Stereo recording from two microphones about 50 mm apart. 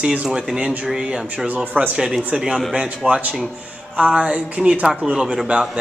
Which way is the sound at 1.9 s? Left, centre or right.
Centre.